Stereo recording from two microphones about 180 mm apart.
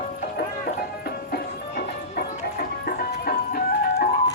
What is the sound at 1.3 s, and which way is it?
Music, 55° left (ahead or behind).